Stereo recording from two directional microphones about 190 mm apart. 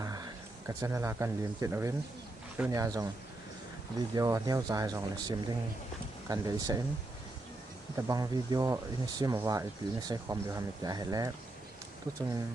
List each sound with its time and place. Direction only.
0.0 s a sound: 20° right (ahead or behind)
0.8 s speech: 15° right (ahead or behind)
4.1 s speech: 15° right (ahead or behind)
7.9 s speech: 20° right (ahead or behind)